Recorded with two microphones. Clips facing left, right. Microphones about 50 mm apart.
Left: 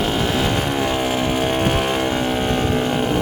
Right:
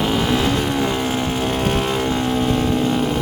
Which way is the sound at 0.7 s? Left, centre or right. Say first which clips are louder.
Even; left.